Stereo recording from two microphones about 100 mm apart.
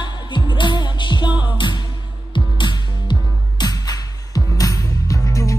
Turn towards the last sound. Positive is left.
turn(degrees=35)  # may be behind; listen again after turning